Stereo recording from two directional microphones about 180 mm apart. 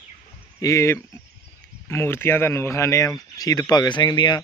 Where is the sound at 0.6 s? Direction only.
15° left (ahead or behind).